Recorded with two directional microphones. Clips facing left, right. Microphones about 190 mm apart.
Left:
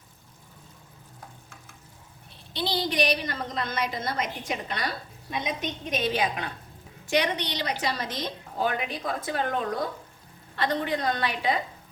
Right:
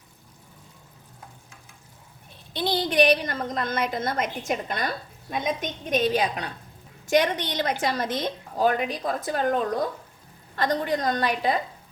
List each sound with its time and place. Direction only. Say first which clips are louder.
2.5 s a woman's voice: right 3 dB; 50° right (ahead or behind)